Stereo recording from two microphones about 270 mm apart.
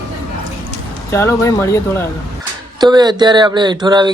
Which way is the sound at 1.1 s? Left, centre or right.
Centre.